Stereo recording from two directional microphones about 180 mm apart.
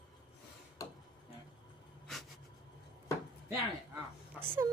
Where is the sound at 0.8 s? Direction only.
20° left (ahead or behind).